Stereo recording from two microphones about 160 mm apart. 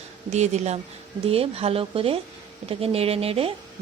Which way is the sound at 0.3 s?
45° right (ahead or behind).